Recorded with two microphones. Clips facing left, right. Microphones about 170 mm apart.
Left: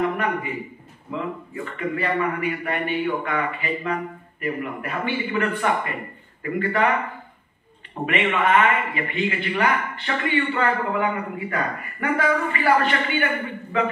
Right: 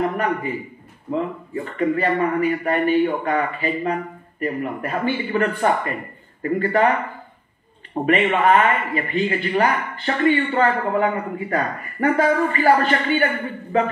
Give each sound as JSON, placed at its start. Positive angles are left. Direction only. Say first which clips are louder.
{"t": 1.1, "sound": "speech", "louder": "right 5 dB", "side_deg": -35}
{"t": 7.9, "sound": "speech", "louder": "right 5 dB", "side_deg": -40}